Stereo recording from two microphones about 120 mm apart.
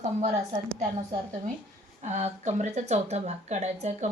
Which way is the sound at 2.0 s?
70° right (ahead or behind).